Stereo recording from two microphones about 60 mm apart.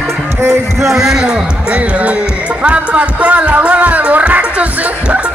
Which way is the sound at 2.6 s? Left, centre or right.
Right.